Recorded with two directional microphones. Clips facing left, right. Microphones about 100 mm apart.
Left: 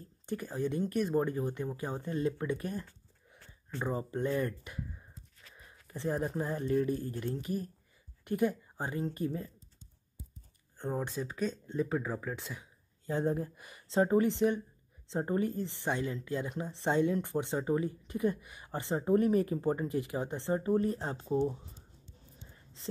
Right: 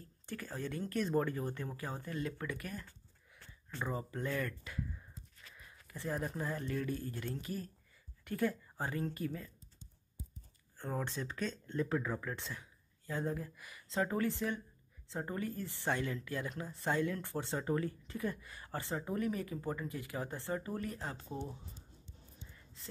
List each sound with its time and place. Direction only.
0.3 s speech: 15° left (ahead or behind)
10.8 s speech: 20° left (ahead or behind)
13.0 s speech: 25° left (ahead or behind)
22.5 s a sound: 25° left (ahead or behind)